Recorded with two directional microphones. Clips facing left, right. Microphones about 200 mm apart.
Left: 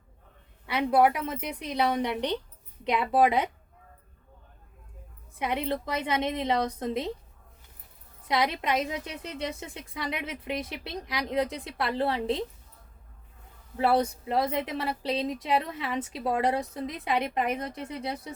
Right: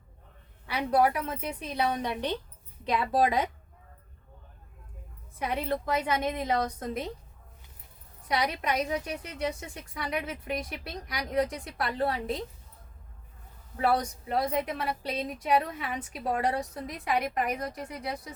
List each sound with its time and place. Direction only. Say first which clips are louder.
0.7 s a woman's voice: left 2 dB; 20° left (ahead or behind)
5.4 s a woman's voice: left 1 dB; 20° left (ahead or behind)
8.3 s a woman's voice: left 2 dB; 25° left (ahead or behind)
13.7 s a woman's voice: left 3 dB; 25° left (ahead or behind)